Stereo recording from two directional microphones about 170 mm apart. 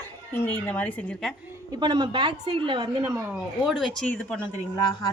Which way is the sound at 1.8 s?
25° right (ahead or behind).